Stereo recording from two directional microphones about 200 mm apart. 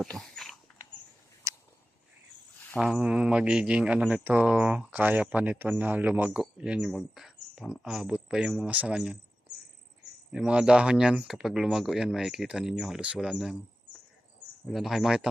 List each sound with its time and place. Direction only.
0.2 s dog: centre (ahead or behind)
1.5 s a sound: 15° right (ahead or behind)
2.7 s speech: centre (ahead or behind)
10.3 s speech: 5° right (ahead or behind)
14.7 s speech: centre (ahead or behind)